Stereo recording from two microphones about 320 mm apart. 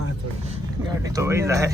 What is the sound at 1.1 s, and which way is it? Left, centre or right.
Speech, centre.